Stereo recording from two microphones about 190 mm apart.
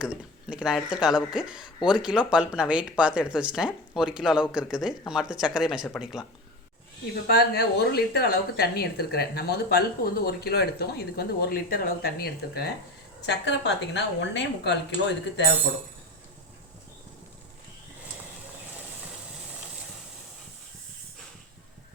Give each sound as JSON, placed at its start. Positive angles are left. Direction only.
{"t": 0.0, "sound": "speech", "side_deg": -5}
{"t": 7.3, "sound": "speech", "side_deg": 55}
{"t": 13.2, "sound": "speech", "side_deg": 70}